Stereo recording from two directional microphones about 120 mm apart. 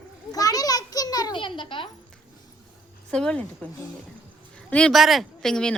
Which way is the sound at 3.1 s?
10° left (ahead or behind).